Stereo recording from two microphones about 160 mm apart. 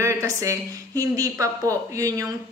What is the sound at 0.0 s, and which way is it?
A woman's voice, 20° right (ahead or behind).